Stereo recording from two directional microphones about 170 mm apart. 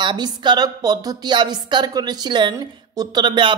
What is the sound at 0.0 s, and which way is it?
A woman's voice, 25° right (ahead or behind).